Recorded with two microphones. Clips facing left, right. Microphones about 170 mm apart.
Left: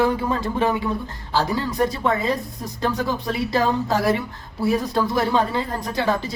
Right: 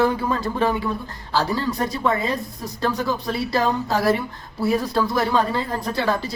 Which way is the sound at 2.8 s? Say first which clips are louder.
Even; 15° left (ahead or behind).